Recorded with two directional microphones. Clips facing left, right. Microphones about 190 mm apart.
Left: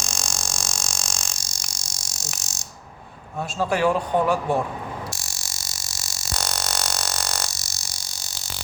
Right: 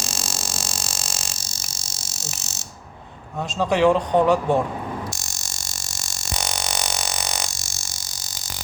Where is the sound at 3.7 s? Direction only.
20° right (ahead or behind).